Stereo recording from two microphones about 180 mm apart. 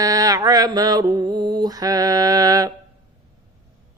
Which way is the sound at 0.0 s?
20° right (ahead or behind).